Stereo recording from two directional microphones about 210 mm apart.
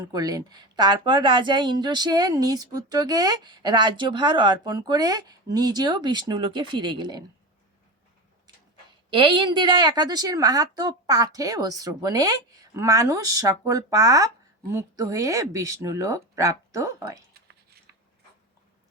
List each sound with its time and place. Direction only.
0.0 s a woman's voice: 15° right (ahead or behind)
9.0 s a woman's voice: 25° right (ahead or behind)
17.3 s a sound: 50° right (ahead or behind)